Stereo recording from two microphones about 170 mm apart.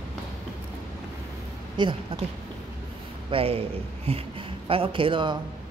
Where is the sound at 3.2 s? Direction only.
35° right (ahead or behind).